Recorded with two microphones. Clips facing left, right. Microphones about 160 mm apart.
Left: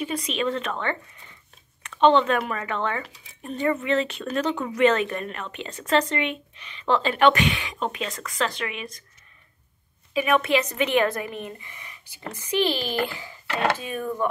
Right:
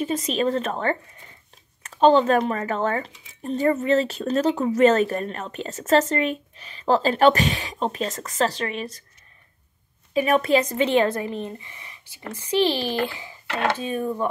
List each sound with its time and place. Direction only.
0.3 s speech: 40° right (ahead or behind)
10.1 s speech: 35° right (ahead or behind); by 13.3 s 20° right (ahead or behind)
13.7 s speech: 35° right (ahead or behind)